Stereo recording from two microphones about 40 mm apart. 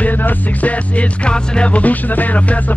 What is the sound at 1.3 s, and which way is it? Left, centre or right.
Music, left.